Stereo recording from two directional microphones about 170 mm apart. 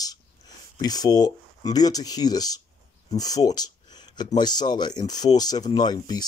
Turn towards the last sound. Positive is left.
turn(degrees=25)  # may be behind; listen again after turning